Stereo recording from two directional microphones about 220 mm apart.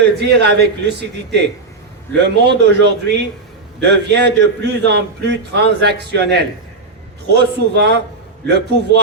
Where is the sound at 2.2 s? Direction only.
50° right (ahead or behind).